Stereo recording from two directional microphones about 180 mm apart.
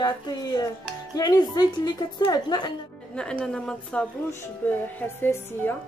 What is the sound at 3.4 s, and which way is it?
A woman's voice, 5° left (ahead or behind).